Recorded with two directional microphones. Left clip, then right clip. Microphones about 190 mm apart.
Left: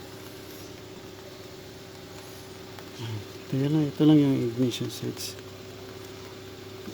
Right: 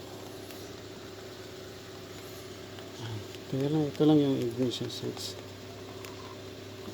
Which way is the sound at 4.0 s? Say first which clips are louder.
Left 4 dB; 25° left (ahead or behind).